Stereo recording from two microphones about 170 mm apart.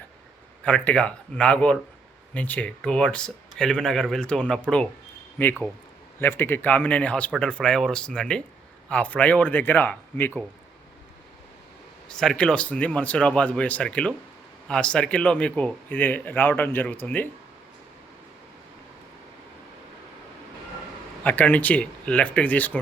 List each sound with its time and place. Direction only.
0.6 s speech: 5° left (ahead or behind)
12.1 s speech: 5° left (ahead or behind)
21.2 s speech: 10° left (ahead or behind)